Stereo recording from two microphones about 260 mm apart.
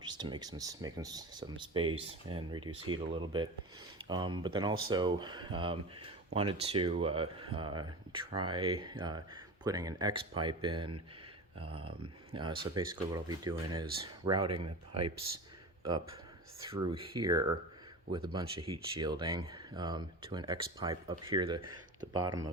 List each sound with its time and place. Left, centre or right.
0.0 s speech: centre
16.6 s speech: centre